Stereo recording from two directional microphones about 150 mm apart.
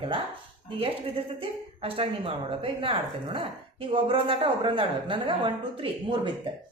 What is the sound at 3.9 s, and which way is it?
A woman's voice, 35° right (ahead or behind).